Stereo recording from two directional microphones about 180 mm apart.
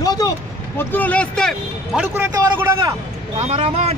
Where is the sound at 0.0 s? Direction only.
20° left (ahead or behind).